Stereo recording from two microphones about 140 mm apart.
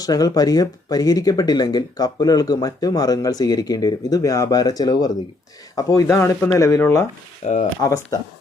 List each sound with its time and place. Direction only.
0.0 s speech: 25° left (ahead or behind)
7.4 s speech: 55° left (ahead or behind)
7.8 s speech: 25° left (ahead or behind)